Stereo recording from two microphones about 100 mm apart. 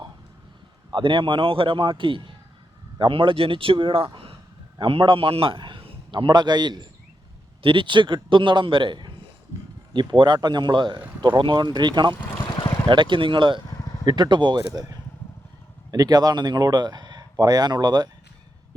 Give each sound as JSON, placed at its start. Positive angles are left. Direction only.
{"t": 0.9, "sound": "a man's voice", "side_deg": -55}
{"t": 7.6, "sound": "speech", "side_deg": -55}
{"t": 12.5, "sound": "boat", "side_deg": 50}
{"t": 12.9, "sound": "speech", "side_deg": -55}
{"t": 15.9, "sound": "speech", "side_deg": -40}